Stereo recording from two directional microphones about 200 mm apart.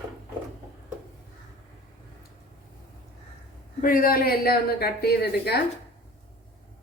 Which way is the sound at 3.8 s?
45° left (ahead or behind).